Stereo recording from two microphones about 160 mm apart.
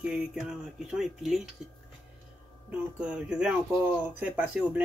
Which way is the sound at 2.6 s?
5° right (ahead or behind).